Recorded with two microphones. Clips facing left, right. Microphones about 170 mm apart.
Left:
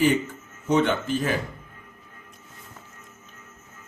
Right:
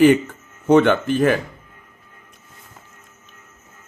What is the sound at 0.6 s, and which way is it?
Speech, 65° right (ahead or behind).